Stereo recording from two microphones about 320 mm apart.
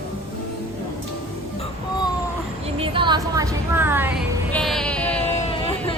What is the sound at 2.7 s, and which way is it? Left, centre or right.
A woman's voice, centre.